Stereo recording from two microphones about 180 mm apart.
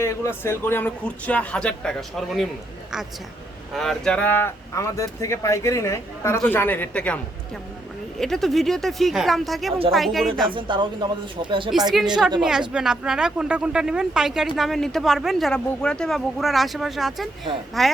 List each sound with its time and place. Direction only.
0.0 s speech: 15° left (ahead or behind)
3.7 s speech: centre (ahead or behind)
8.2 s speech: centre (ahead or behind)
10.5 s speech: 25° right (ahead or behind)
12.4 s speech: 5° right (ahead or behind)